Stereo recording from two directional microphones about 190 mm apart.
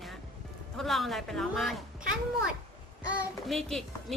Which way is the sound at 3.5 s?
Centre (ahead or behind).